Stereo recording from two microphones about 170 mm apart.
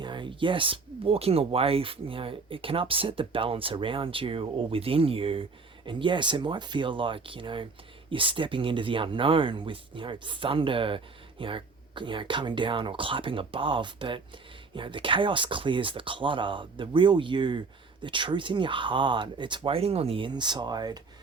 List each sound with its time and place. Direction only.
0.0 s speech: 25° right (ahead or behind)